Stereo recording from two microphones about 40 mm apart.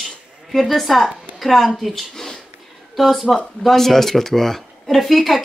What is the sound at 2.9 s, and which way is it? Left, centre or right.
Speech, centre.